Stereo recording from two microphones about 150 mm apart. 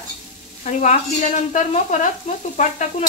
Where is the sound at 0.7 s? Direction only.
50° left (ahead or behind).